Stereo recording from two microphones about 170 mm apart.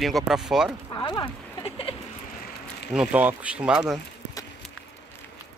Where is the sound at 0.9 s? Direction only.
25° left (ahead or behind).